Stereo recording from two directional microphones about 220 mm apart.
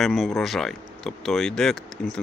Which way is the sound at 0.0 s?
Centre (ahead or behind).